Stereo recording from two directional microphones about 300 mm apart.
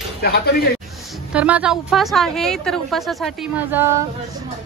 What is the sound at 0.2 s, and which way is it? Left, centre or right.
Speech, left.